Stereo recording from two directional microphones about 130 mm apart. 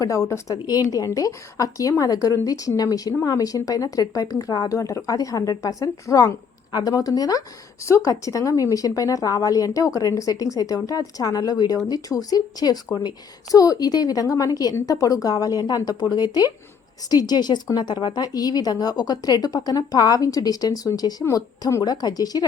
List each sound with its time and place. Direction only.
0.0 s speech: 25° left (ahead or behind)